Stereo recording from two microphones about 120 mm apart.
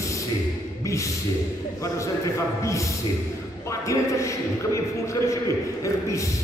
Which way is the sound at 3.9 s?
25° left (ahead or behind).